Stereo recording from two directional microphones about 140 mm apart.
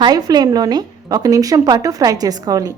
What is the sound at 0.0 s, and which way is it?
A woman's voice, 30° right (ahead or behind).